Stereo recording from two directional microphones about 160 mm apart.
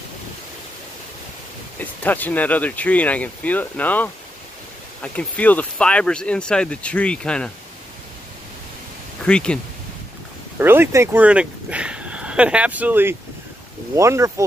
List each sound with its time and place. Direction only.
1.8 s speech: 10° left (ahead or behind)
9.2 s speech: 5° left (ahead or behind)
10.6 s speech: 15° right (ahead or behind)